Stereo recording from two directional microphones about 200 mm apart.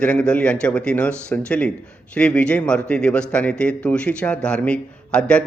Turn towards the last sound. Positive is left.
turn(degrees=5)  # may be behind; listen again after turning